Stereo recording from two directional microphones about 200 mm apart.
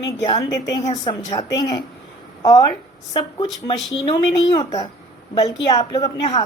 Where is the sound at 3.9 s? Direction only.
20° left (ahead or behind).